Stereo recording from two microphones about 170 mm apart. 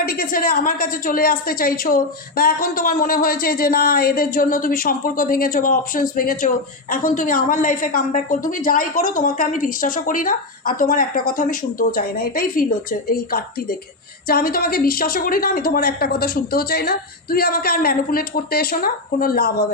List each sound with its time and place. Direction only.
0.0 s a woman's voice: 60° left (ahead or behind)